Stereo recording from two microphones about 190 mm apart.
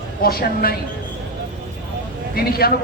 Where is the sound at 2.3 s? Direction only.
55° left (ahead or behind).